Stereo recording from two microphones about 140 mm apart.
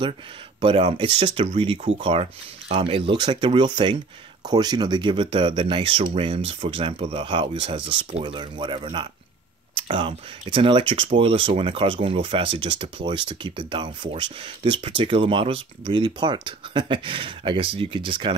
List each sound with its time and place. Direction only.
0.6 s speech: 35° right (ahead or behind)
8.1 s speech: 50° right (ahead or behind)
8.4 s speech: 35° right (ahead or behind)